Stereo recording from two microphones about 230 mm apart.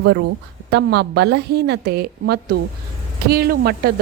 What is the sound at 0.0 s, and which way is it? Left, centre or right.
Speech, right.